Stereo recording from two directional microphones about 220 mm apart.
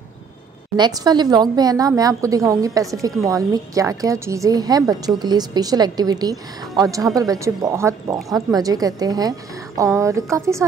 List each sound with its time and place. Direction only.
0.7 s a woman's voice: 20° right (ahead or behind)